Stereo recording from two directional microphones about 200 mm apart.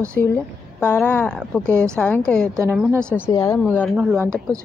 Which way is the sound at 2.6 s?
10° right (ahead or behind).